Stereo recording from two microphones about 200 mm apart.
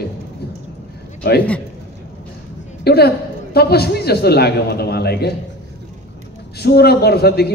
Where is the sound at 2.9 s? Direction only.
50° left (ahead or behind).